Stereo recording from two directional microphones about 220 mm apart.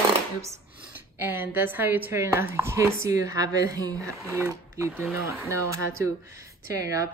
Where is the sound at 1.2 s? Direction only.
10° right (ahead or behind).